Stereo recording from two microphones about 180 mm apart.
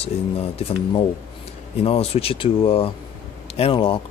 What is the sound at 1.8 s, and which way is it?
Speech, 35° left (ahead or behind).